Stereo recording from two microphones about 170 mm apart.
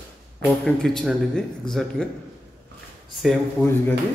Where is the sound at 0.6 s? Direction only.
5° left (ahead or behind).